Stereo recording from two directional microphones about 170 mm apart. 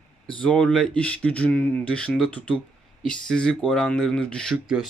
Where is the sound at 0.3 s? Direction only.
5° left (ahead or behind).